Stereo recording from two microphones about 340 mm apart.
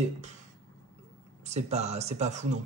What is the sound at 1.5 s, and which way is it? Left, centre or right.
Speech, centre.